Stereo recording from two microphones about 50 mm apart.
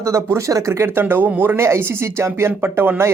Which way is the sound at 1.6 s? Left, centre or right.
Right.